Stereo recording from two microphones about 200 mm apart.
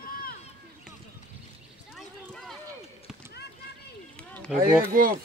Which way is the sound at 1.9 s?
Centre (ahead or behind).